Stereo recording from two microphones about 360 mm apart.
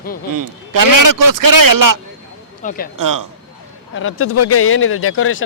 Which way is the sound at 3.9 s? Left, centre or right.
Left.